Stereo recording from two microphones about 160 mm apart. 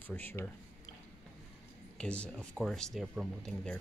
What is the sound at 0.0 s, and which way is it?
Speech, 10° left (ahead or behind).